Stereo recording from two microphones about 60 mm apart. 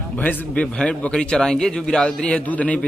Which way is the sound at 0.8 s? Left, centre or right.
Centre.